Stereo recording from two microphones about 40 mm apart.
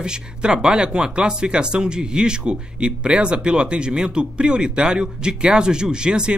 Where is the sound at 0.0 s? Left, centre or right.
Right.